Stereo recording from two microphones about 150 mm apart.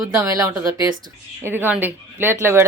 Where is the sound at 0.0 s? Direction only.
20° right (ahead or behind).